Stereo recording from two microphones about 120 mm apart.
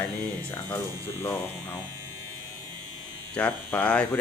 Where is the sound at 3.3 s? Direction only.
10° left (ahead or behind).